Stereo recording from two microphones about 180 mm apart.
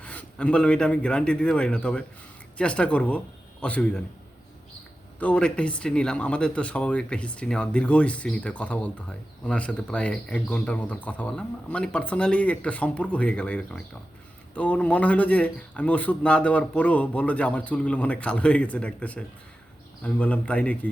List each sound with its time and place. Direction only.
0.0 s a man's voice: 5° left (ahead or behind)
5.2 s speech: 5° left (ahead or behind)